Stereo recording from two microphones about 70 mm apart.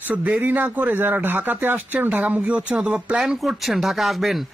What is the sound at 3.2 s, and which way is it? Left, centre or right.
Speech, centre.